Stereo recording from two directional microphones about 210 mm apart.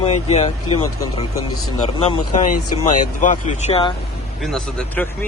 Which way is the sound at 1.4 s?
90° left.